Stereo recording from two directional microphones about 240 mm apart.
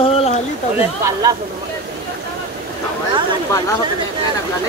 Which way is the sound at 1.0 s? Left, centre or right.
Centre.